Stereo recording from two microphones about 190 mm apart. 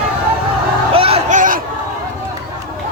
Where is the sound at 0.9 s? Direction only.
30° right (ahead or behind).